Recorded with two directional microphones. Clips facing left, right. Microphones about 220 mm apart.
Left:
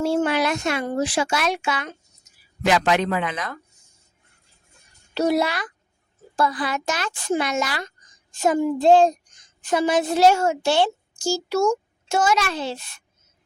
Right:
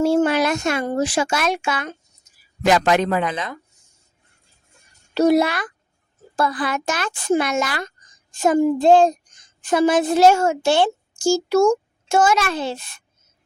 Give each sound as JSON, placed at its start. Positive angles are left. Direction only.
{"t": 0.0, "sound": "a woman's voice", "side_deg": -40}
{"t": 5.1, "sound": "a woman's voice", "side_deg": -50}